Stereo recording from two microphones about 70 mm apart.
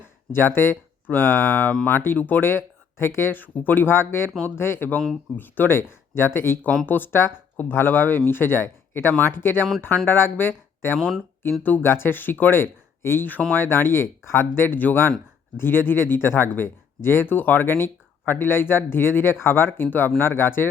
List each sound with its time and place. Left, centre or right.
0.3 s speech: left